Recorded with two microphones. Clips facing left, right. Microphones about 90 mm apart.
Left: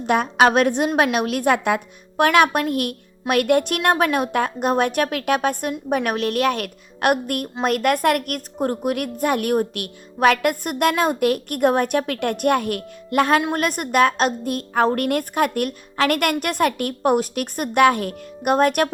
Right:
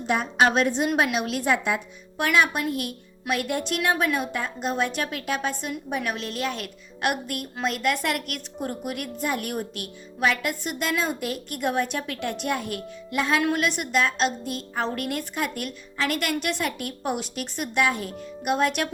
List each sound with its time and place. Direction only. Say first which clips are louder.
0.1 s a woman's voice: left 5 dB; 65° left (ahead or behind)
13.5 s a woman's voice: left 3 dB; 45° left (ahead or behind)